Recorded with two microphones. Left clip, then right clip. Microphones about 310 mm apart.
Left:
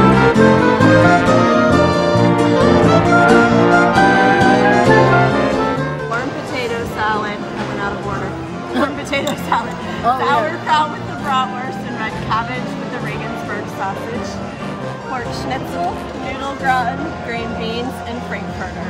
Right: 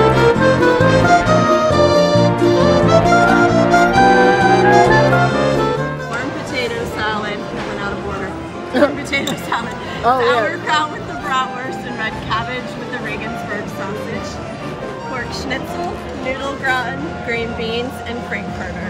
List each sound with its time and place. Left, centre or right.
0.0 s music: centre
10.2 s music: centre
16.6 s music: centre